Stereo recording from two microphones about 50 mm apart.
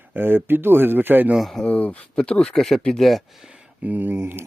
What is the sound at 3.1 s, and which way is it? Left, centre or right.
Speech, centre.